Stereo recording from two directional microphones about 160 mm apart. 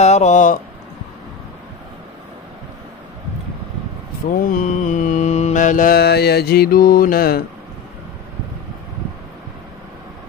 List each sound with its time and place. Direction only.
0.0 s speech: 45° left (ahead or behind)
4.3 s mantra: 60° left (ahead or behind)